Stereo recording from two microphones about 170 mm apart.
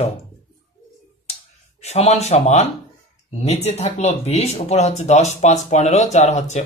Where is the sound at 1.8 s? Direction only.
40° left (ahead or behind).